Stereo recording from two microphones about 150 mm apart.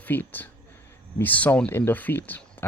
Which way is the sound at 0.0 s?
15° left (ahead or behind).